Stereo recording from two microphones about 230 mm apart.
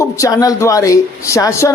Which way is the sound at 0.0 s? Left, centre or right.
Centre.